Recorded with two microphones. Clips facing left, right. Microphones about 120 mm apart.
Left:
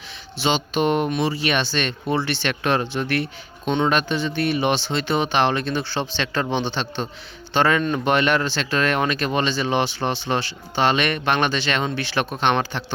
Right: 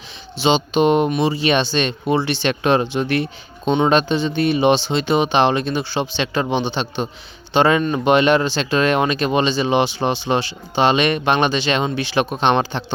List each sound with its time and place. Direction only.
0.3 s speech: 20° right (ahead or behind)